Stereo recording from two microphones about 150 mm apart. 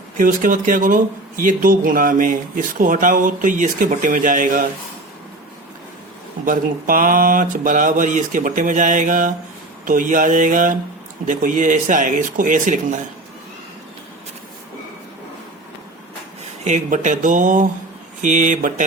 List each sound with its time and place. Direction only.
0.2 s speech: 60° right (ahead or behind)
6.4 s speech: 65° right (ahead or behind)
16.4 s speech: 50° right (ahead or behind)